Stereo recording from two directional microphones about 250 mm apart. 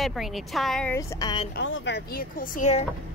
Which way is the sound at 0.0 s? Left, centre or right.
Centre.